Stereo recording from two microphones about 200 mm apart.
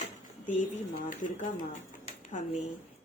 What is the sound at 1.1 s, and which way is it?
Speech, 40° left (ahead or behind).